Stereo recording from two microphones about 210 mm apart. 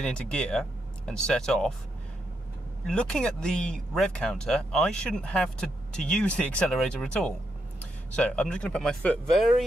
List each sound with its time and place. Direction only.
0.0 s speech: 5° left (ahead or behind)
2.9 s speech: 5° left (ahead or behind)